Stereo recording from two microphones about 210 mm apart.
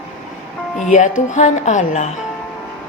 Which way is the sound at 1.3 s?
35° left (ahead or behind).